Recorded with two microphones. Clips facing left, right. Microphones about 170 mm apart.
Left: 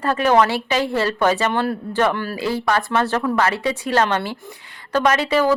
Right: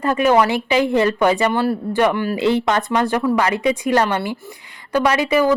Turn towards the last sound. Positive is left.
turn(degrees=-10)  # may be behind; listen again after turning